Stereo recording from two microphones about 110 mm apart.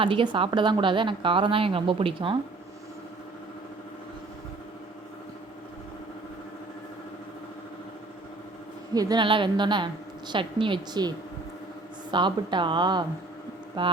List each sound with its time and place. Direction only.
0.0 s a woman's voice: 50° right (ahead or behind)
8.9 s a woman's voice: 35° right (ahead or behind)
12.1 s a woman's voice: 45° right (ahead or behind)